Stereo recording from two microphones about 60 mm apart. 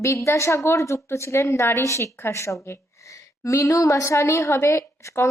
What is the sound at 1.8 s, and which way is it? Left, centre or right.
A woman's voice, left.